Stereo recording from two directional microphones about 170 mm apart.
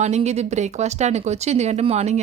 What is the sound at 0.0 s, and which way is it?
Speech, 40° right (ahead or behind).